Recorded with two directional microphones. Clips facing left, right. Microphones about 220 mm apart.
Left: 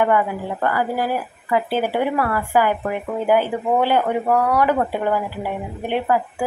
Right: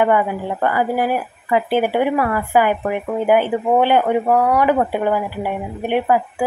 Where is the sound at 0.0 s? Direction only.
20° right (ahead or behind).